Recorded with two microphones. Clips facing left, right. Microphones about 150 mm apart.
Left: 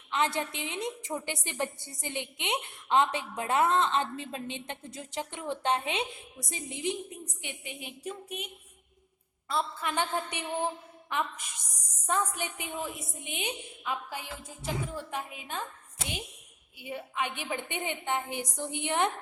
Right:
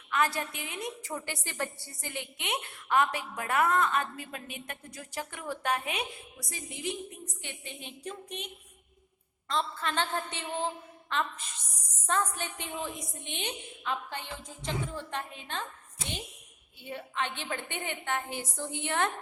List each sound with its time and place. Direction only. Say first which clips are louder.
0.1 s a woman's voice: even; 20° left (ahead or behind)
9.5 s a woman's voice: even; 10° left (ahead or behind)
16.7 s a woman's voice: left 1 dB; 10° left (ahead or behind)